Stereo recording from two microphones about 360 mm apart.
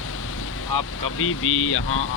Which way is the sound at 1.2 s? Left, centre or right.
Left.